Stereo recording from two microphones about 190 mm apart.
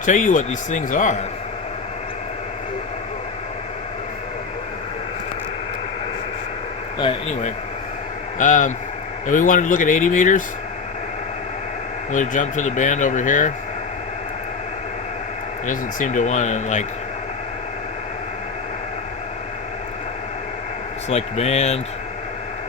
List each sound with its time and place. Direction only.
0.0 s speech: 45° left (ahead or behind)
8.4 s speech: 40° left (ahead or behind)
12.1 s speech: 40° left (ahead or behind)
15.6 s speech: 45° left (ahead or behind)
21.1 s speech: 35° left (ahead or behind)